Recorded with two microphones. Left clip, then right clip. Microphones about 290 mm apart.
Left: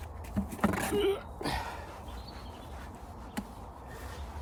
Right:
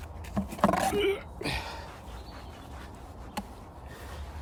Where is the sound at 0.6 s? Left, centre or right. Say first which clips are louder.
Right 7 dB; centre.